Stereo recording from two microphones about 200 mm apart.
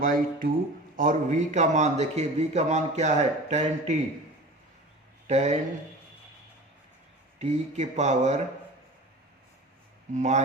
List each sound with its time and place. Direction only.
0.0 s a man's voice: 45° right (ahead or behind)
5.3 s a man's voice: 35° right (ahead or behind)
7.3 s a man's voice: 35° right (ahead or behind)
10.2 s a man's voice: 35° right (ahead or behind)